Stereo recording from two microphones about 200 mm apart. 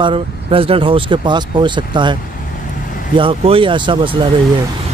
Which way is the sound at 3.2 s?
30° right (ahead or behind).